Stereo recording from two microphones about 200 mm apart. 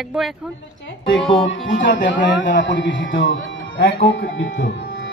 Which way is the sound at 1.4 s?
70° left (ahead or behind).